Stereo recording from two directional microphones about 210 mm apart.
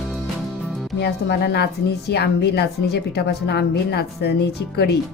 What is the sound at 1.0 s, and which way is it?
Speech, 50° left (ahead or behind).